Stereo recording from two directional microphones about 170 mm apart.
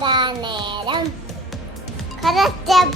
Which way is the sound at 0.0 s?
25° right (ahead or behind).